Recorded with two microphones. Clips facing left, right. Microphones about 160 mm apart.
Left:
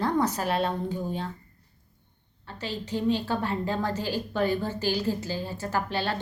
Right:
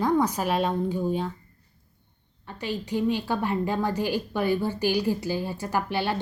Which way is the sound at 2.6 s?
15° right (ahead or behind).